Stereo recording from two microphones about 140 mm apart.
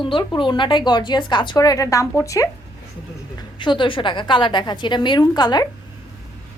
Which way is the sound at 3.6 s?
35° left (ahead or behind).